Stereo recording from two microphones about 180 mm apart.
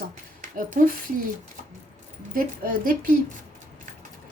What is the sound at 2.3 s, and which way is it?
Speech, 50° right (ahead or behind).